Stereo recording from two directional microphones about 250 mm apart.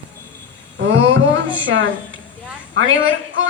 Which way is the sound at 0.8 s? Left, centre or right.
Right.